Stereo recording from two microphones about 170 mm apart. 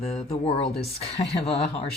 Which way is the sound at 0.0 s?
40° left (ahead or behind).